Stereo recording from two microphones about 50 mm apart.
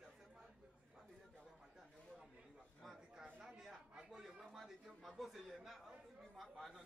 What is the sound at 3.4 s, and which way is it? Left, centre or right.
Chatter, centre.